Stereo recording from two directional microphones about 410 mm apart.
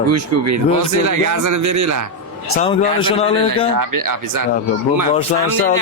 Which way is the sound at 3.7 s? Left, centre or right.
Right.